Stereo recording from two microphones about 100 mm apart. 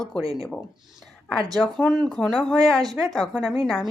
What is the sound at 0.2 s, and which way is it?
Speech, 40° right (ahead or behind).